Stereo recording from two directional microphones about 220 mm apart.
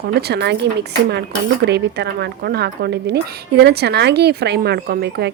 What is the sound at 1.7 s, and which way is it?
Speech, 50° right (ahead or behind).